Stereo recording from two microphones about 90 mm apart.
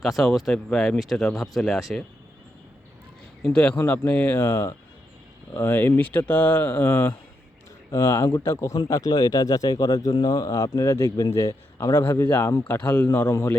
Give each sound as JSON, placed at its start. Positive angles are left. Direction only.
{"t": 0.0, "sound": "speech", "side_deg": 0}
{"t": 3.4, "sound": "speech", "side_deg": 15}
{"t": 7.9, "sound": "speech", "side_deg": 30}
{"t": 12.6, "sound": "speech", "side_deg": 20}